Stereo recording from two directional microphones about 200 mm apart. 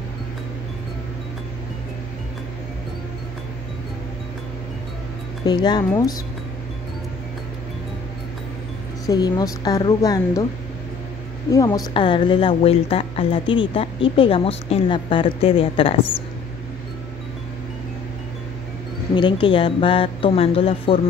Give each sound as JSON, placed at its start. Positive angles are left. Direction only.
{"t": 5.4, "sound": "a woman's voice", "side_deg": 20}
{"t": 9.0, "sound": "a woman's voice", "side_deg": 20}
{"t": 11.5, "sound": "a woman's voice", "side_deg": 20}
{"t": 19.1, "sound": "a woman's voice", "side_deg": 25}